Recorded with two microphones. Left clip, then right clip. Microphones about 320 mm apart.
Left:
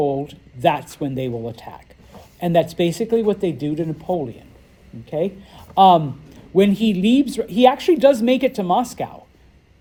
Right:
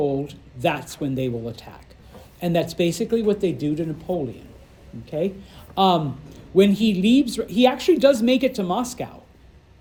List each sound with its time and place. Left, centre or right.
0.0 s speech: left